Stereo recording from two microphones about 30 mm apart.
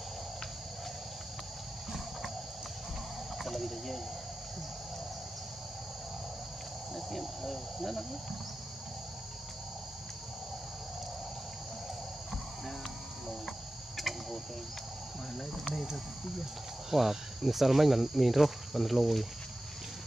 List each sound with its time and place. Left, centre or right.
3.5 s speech: centre
7.0 s speech: centre
13.9 s a sound: centre
16.9 s speech: centre